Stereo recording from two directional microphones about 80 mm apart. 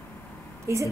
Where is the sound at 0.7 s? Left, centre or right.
Right.